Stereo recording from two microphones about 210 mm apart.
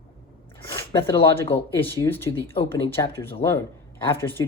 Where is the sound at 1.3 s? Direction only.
10° left (ahead or behind).